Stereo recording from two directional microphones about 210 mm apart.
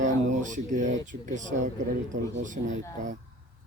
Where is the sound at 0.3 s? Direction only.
35° right (ahead or behind).